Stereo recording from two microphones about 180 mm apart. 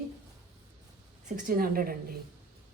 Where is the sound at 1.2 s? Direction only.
50° right (ahead or behind).